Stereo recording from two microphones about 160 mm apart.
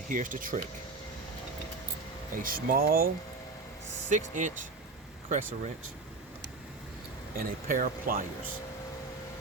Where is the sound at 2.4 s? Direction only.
65° right (ahead or behind).